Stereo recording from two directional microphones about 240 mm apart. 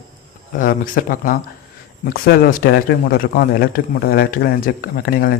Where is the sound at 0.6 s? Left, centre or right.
Left.